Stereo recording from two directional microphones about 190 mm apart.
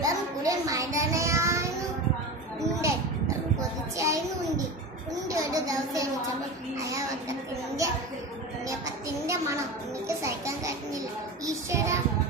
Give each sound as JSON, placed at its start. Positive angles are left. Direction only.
{"t": 0.0, "sound": "child singing", "side_deg": -20}
{"t": 3.6, "sound": "a sound", "side_deg": -15}
{"t": 10.1, "sound": "music", "side_deg": -15}
{"t": 11.4, "sound": "child singing", "side_deg": -15}